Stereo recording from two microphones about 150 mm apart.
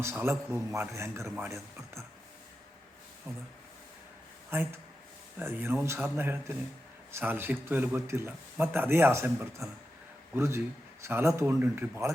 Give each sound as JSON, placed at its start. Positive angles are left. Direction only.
{"t": 0.0, "sound": "speech", "side_deg": -15}
{"t": 3.3, "sound": "speech", "side_deg": -15}
{"t": 4.5, "sound": "speech", "side_deg": -15}